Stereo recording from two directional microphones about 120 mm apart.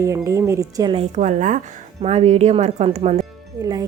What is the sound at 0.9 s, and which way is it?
A woman's voice, 75° right (ahead or behind).